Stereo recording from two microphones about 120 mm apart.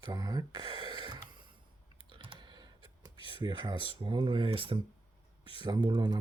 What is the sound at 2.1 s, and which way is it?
Typing, 45° right (ahead or behind).